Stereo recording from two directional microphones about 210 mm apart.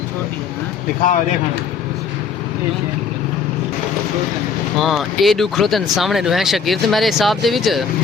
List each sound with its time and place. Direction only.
4.8 s speech: centre (ahead or behind)